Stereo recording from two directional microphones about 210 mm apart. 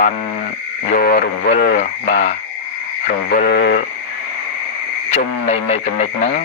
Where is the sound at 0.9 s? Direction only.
45° left (ahead or behind).